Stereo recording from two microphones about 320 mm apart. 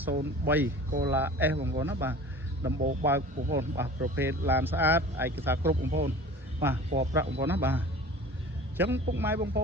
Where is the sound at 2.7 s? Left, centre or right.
Right.